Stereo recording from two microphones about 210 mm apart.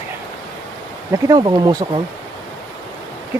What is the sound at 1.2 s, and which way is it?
Speech, 20° right (ahead or behind).